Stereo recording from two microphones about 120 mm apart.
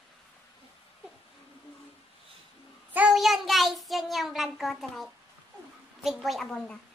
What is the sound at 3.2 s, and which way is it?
A woman's voice, centre (ahead or behind).